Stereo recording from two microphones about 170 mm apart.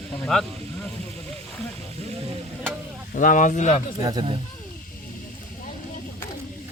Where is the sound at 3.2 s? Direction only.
50° left (ahead or behind).